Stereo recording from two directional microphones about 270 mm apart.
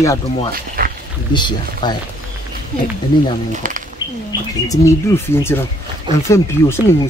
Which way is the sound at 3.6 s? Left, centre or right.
Right.